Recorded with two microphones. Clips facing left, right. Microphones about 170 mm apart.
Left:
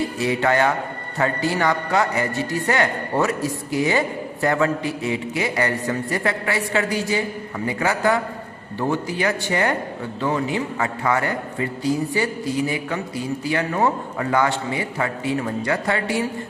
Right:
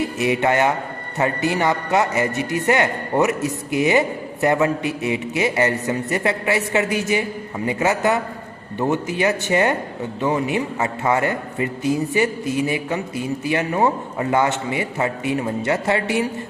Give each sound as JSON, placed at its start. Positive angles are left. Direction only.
{"t": 0.0, "sound": "a man's voice", "side_deg": -20}